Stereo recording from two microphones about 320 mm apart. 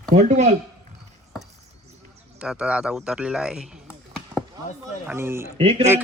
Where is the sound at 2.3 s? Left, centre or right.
Centre.